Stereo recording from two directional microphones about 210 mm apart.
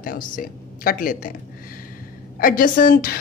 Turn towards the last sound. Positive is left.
turn(degrees=45)  # may be behind; listen again after turning